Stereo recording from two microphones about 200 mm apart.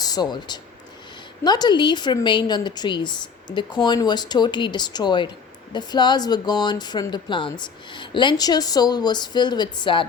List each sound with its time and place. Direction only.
0.0 s a woman's voice: 20° left (ahead or behind)